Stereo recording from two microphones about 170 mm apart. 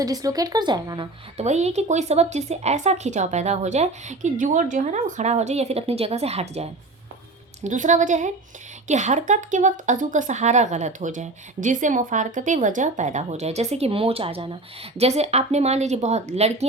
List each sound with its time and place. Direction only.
0.0 s a woman's voice: 20° right (ahead or behind)
1.4 s a woman's voice: 40° right (ahead or behind)